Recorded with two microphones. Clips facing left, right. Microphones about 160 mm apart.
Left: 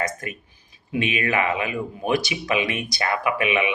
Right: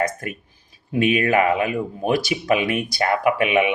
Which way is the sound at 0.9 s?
45° right (ahead or behind).